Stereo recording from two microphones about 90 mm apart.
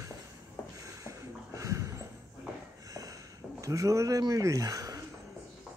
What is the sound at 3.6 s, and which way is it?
Speech, 40° right (ahead or behind).